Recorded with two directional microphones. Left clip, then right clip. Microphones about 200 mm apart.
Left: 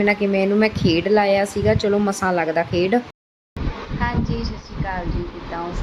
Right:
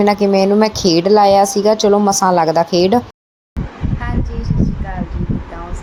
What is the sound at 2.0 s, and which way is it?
Speech, 5° left (ahead or behind).